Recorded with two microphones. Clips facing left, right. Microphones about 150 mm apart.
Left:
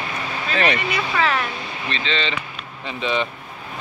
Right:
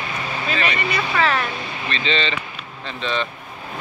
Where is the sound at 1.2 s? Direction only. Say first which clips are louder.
Right 1 dB; 10° left (ahead or behind).